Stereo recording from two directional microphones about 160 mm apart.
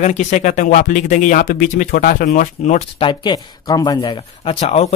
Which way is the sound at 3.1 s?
25° left (ahead or behind).